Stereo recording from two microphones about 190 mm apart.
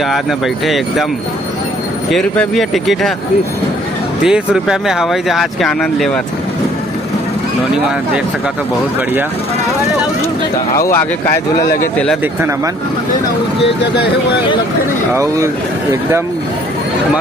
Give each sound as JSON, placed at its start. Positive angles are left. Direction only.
{"t": 0.0, "sound": "speech", "side_deg": 0}
{"t": 2.0, "sound": "speech", "side_deg": 5}
{"t": 4.2, "sound": "speech", "side_deg": -5}
{"t": 11.6, "sound": "speech", "side_deg": 50}
{"t": 12.2, "sound": "speech", "side_deg": -10}
{"t": 15.1, "sound": "speech", "side_deg": -15}